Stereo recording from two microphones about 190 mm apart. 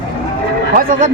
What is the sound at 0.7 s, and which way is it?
Speech, 45° right (ahead or behind).